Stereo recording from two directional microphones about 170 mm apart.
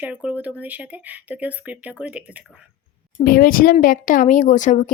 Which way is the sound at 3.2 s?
55° left (ahead or behind).